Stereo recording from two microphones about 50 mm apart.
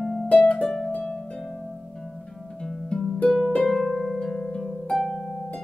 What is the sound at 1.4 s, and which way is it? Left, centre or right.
Harp, centre.